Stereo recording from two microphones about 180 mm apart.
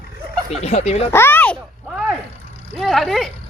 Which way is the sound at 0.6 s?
35° left (ahead or behind).